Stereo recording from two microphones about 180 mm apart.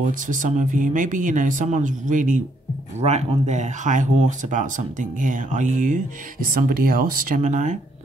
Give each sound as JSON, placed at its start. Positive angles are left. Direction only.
{"t": 0.0, "sound": "speech", "side_deg": -45}